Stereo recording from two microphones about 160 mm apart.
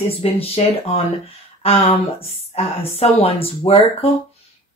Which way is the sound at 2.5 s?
40° left (ahead or behind).